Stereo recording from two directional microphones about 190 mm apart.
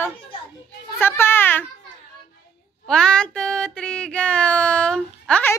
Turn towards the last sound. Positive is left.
turn(degrees=5)  # may be behind; listen again after turning